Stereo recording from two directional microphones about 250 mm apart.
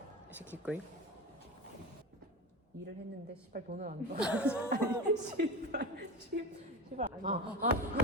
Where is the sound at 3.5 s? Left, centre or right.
Right.